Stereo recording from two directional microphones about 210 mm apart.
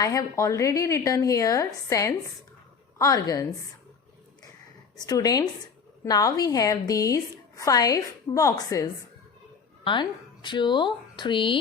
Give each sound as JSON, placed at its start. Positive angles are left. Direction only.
{"t": 0.0, "sound": "a woman's voice", "side_deg": 15}
{"t": 5.0, "sound": "a woman's voice", "side_deg": 15}